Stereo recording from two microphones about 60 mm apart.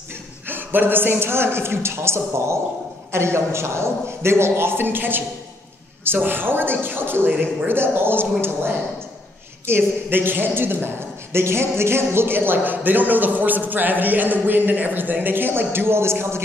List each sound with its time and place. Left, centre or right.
0.1 s a man's voice: right